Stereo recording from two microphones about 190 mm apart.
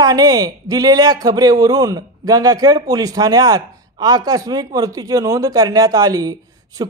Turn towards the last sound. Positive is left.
turn(degrees=-20)  # may be behind; listen again after turning